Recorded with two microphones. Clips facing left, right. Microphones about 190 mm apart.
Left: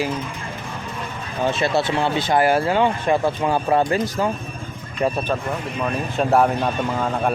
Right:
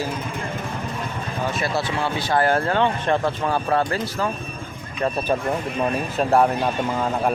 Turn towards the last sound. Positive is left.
turn(degrees=0)  # may be behind; listen again after turning